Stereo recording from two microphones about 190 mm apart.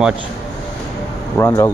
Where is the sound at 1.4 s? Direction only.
15° left (ahead or behind).